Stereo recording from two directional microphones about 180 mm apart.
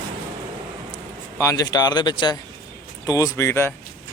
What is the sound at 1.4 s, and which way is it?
Speech, 20° left (ahead or behind).